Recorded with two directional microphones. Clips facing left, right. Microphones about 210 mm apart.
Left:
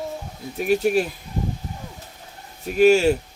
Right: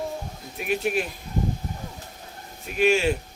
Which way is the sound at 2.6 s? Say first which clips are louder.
Left 6 dB; 40° left (ahead or behind).